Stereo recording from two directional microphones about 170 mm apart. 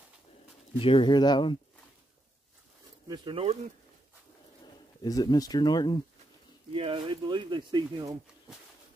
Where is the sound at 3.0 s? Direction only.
25° right (ahead or behind).